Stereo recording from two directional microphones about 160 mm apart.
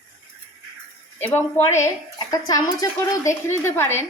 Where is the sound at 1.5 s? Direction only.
15° left (ahead or behind).